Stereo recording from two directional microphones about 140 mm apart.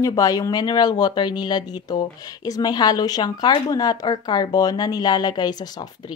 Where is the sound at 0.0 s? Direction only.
25° left (ahead or behind).